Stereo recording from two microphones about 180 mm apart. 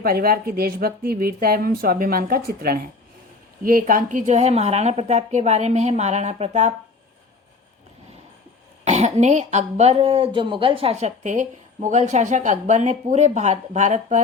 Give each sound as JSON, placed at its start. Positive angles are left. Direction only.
{"t": 0.0, "sound": "speech", "side_deg": -55}
{"t": 8.8, "sound": "speech", "side_deg": -40}